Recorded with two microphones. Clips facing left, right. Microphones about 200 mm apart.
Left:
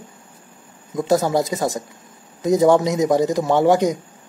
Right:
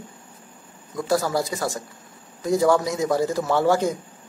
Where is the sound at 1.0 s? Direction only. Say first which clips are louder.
Left 5 dB; 20° left (ahead or behind).